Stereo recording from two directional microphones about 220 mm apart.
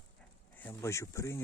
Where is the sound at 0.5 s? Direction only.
10° left (ahead or behind).